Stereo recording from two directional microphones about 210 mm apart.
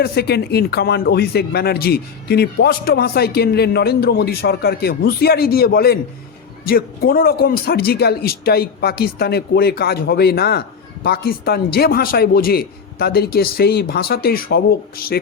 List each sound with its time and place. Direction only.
0.0 s speech: 50° left (ahead or behind)